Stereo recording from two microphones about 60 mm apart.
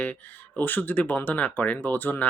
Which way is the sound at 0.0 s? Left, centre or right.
Left.